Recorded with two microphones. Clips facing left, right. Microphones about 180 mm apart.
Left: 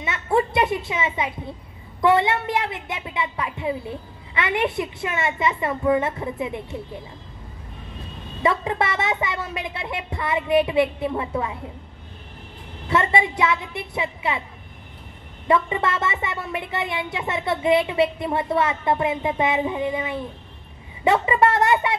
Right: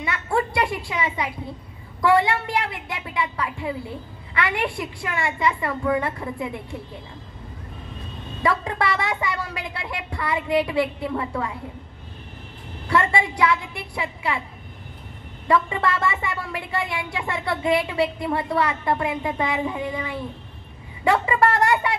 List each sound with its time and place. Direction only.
0.0 s a child's voice: 20° left (ahead or behind)
8.4 s a child's voice: 20° left (ahead or behind)
12.8 s a child's voice: 20° left (ahead or behind)
15.4 s a child's voice: 20° left (ahead or behind)